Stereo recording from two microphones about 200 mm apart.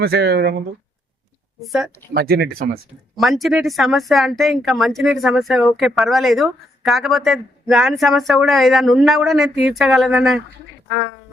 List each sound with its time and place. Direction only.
0.0 s speech: 55° right (ahead or behind)
1.6 s speech: centre (ahead or behind)
2.1 s speech: 50° right (ahead or behind)
3.2 s speech: centre (ahead or behind)